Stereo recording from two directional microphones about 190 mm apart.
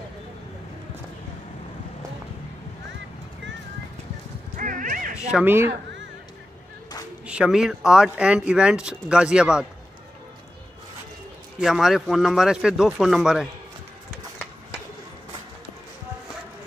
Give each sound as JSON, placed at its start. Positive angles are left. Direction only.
{"t": 4.6, "sound": "dog", "side_deg": -45}
{"t": 5.1, "sound": "speech", "side_deg": -10}
{"t": 7.2, "sound": "speech", "side_deg": -5}
{"t": 11.6, "sound": "speech", "side_deg": 0}